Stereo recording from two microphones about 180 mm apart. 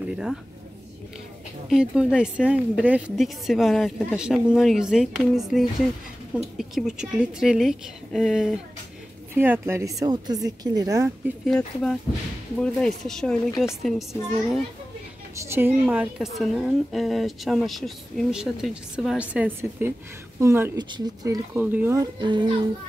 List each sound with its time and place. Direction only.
0.1 s speech: centre (ahead or behind)
1.7 s a woman's voice: 5° right (ahead or behind)
9.3 s speech: 15° right (ahead or behind)
11.4 s a woman's voice: centre (ahead or behind)
15.3 s a woman's voice: 15° right (ahead or behind)
22.2 s speech: 25° right (ahead or behind)